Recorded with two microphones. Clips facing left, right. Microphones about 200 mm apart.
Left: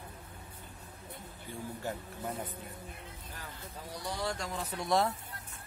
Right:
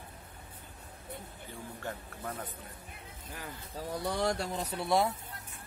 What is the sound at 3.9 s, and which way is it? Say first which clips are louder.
Speech: right 5 dB; 55° right (ahead or behind).